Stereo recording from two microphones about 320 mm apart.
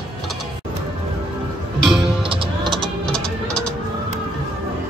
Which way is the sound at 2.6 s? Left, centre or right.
Centre.